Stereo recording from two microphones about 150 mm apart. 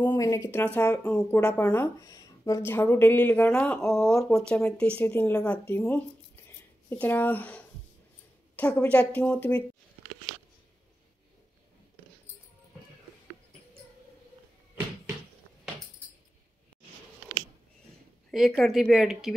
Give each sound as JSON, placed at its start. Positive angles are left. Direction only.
{"t": 0.1, "sound": "speech", "side_deg": 20}
{"t": 18.3, "sound": "speech", "side_deg": 0}